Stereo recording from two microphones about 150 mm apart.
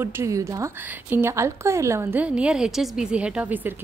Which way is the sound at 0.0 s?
15° right (ahead or behind).